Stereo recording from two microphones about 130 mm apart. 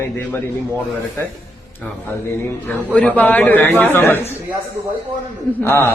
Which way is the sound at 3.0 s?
10° left (ahead or behind).